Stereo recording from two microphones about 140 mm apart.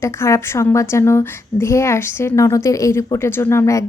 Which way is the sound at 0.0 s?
20° left (ahead or behind).